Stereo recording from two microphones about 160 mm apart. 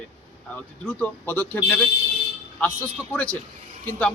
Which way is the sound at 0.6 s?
10° left (ahead or behind).